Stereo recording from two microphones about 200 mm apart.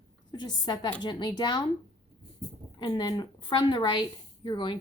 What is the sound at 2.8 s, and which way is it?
A woman's voice, 20° left (ahead or behind).